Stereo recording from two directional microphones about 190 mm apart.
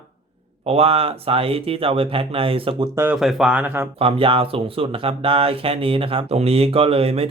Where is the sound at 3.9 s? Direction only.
30° right (ahead or behind).